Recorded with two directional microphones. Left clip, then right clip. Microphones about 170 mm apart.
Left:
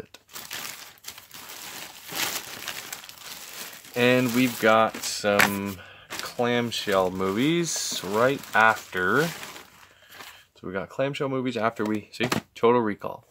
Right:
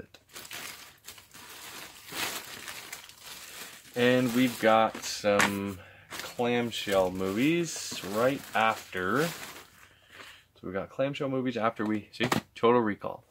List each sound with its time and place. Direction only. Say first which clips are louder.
1.8 s a sound: left 5 dB; 60° left (ahead or behind)
3.9 s speech: left 4 dB; 35° left (ahead or behind)
6.3 s speech: left 4 dB; 45° left (ahead or behind)
10.7 s speech: left 3 dB; 30° left (ahead or behind)